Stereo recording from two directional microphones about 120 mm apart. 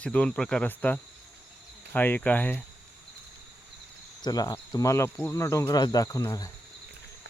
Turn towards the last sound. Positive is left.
turn(degrees=30)  # may be behind; listen again after turning